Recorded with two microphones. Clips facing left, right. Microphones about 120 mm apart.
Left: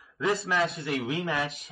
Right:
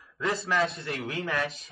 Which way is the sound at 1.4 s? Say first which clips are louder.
Right 1 dB; centre (ahead or behind).